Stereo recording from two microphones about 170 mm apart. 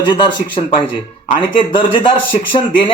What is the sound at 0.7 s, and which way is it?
Speech, 30° left (ahead or behind).